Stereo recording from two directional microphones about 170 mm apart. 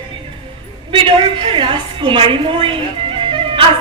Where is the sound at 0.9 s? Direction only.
30° right (ahead or behind).